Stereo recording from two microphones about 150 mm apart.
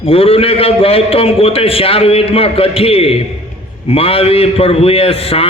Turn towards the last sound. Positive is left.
turn(degrees=40)  # may be behind; listen again after turning